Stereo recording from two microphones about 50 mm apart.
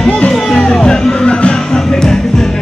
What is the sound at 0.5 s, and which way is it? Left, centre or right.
Music, centre.